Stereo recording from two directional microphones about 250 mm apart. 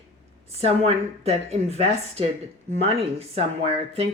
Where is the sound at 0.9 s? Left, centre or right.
Right.